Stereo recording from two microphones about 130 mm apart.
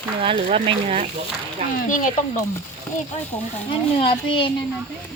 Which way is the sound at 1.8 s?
90° left.